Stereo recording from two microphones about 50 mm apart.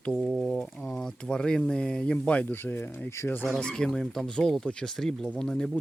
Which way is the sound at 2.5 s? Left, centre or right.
Left.